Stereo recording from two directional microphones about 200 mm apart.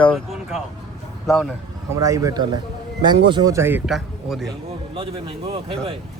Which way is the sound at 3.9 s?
Centre (ahead or behind).